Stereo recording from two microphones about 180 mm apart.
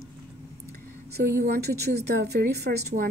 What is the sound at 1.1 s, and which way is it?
Speech, 65° right (ahead or behind).